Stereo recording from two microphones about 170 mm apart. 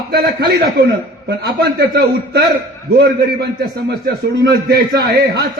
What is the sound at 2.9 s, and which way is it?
A man's voice, 75° right (ahead or behind).